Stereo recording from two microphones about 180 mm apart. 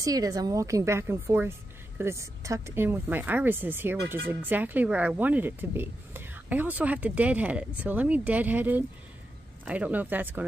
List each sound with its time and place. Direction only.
0.0 s speech: 20° right (ahead or behind)